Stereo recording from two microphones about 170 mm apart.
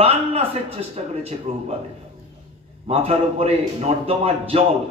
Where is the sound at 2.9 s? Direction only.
35° right (ahead or behind).